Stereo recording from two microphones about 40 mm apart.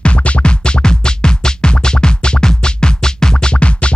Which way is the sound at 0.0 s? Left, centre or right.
Left.